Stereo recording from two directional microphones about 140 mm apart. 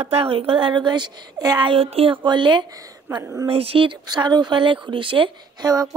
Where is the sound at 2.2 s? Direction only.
35° right (ahead or behind).